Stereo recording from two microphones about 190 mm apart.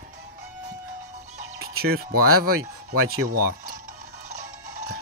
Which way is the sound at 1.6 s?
55° right (ahead or behind).